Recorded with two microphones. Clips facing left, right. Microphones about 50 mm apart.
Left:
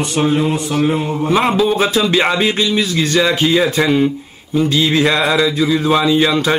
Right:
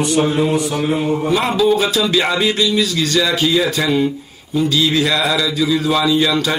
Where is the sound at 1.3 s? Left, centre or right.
Left.